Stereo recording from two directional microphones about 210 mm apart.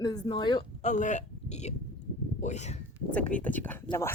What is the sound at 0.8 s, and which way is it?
Speech, 35° left (ahead or behind).